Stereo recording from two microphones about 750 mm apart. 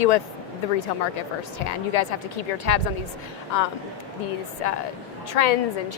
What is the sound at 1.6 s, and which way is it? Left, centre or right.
A woman's voice, left.